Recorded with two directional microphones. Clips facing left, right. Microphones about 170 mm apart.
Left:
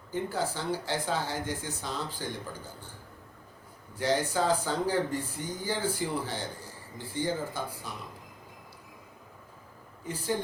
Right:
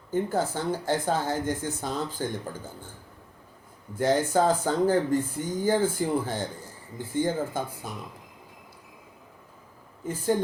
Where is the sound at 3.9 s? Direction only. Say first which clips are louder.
Right 5 dB; 50° right (ahead or behind).